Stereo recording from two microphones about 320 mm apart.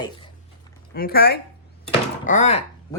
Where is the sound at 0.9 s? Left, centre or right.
Left.